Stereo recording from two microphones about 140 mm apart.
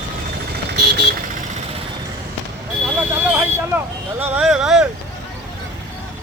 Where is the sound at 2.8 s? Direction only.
10° right (ahead or behind).